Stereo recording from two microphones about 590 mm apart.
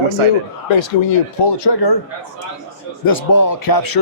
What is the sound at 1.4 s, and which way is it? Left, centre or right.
Speech, left.